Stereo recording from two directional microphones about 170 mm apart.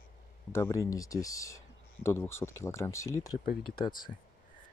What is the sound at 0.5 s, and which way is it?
Speech, 15° left (ahead or behind).